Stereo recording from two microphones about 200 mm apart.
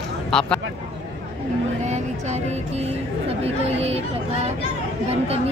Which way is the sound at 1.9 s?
35° right (ahead or behind).